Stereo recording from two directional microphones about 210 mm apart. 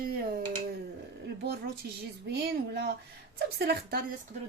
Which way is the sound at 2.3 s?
50° right (ahead or behind).